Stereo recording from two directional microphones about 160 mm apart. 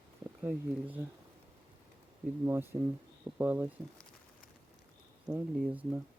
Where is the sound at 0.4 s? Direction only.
10° right (ahead or behind).